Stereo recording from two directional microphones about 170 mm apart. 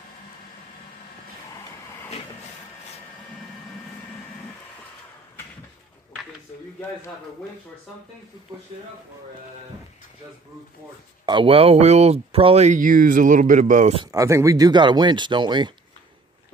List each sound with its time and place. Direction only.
11.2 s speech: 30° right (ahead or behind); by 13.9 s 45° right (ahead or behind)
14.1 s speech: 20° right (ahead or behind)